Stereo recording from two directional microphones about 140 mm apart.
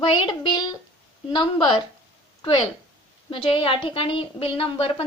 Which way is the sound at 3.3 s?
40° left (ahead or behind).